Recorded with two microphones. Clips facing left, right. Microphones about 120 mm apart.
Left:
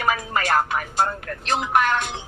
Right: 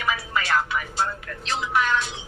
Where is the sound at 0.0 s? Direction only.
45° left (ahead or behind).